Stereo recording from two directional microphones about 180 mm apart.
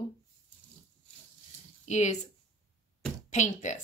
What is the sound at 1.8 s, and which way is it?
Speech, 40° left (ahead or behind).